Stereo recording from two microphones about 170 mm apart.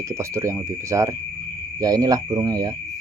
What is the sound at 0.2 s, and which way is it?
Speech, 15° right (ahead or behind).